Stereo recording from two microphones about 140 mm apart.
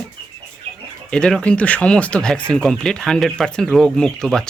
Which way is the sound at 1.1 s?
5° left (ahead or behind).